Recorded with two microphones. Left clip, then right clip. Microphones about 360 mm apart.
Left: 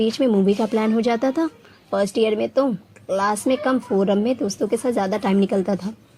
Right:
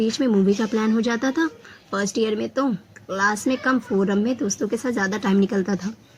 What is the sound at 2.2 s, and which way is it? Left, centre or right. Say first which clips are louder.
Speech: left 3 dB; left.